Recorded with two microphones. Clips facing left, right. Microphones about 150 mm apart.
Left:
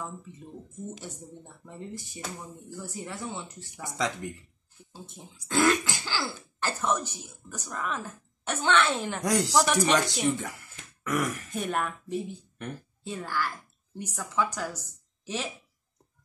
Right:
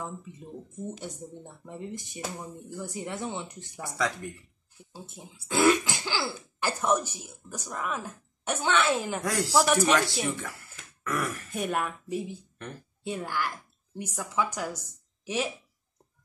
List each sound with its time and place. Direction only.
1.7 s speech: 20° right (ahead or behind)
3.8 s speech: 20° left (ahead or behind)
4.9 s speech: 10° right (ahead or behind)
9.2 s speech: 20° left (ahead or behind)
9.5 s speech: 5° right (ahead or behind)
10.0 s speech: 15° left (ahead or behind)
11.5 s speech: 5° right (ahead or behind)